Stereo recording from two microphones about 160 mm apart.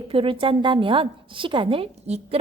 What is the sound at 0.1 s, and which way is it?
A woman's voice, 35° right (ahead or behind).